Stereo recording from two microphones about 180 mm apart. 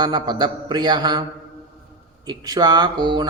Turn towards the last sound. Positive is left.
turn(degrees=-25)  # may be behind; listen again after turning